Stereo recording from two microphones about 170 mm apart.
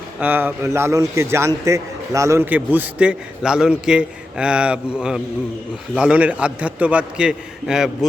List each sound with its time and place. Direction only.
0.2 s a man's voice: 10° right (ahead or behind)